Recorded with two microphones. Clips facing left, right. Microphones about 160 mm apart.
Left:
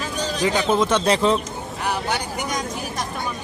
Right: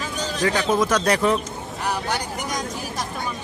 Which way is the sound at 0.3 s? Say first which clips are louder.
Left 1 dB; 15° left (ahead or behind).